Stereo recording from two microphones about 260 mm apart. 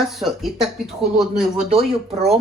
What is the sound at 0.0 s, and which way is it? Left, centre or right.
Speech, centre.